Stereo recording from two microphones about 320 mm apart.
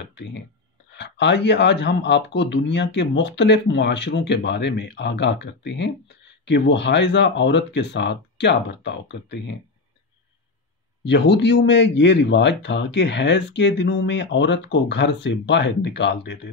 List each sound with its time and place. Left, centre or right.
0.0 s a sound: left
0.9 s speech: left
11.1 s speech: left